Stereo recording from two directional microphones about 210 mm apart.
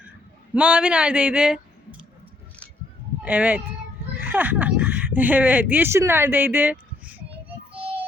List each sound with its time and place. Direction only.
0.5 s speech: 5° right (ahead or behind)
3.2 s speech: 5° right (ahead or behind)
7.3 s child singing: 25° right (ahead or behind)